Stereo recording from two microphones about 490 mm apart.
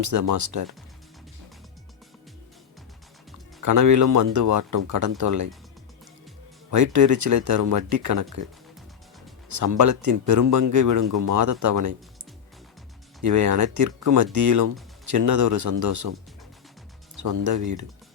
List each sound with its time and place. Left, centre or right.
0.0 s speech: right
3.6 s speech: right
6.7 s speech: right
9.5 s speech: right
13.2 s speech: right
17.2 s speech: right